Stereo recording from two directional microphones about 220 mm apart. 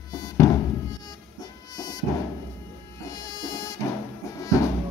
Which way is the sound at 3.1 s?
15° left (ahead or behind).